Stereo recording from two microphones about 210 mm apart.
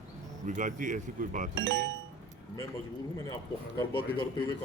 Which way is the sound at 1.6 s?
50° right (ahead or behind).